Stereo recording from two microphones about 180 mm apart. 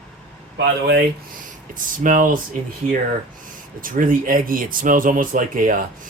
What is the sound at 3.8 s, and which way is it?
A man's voice, 50° right (ahead or behind).